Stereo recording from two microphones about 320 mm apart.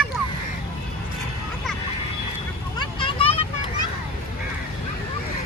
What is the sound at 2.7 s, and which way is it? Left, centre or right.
Vehicle, centre.